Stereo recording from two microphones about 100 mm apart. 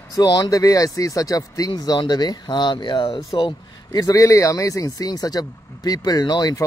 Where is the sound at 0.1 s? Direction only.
40° left (ahead or behind); by 4.0 s 55° left (ahead or behind).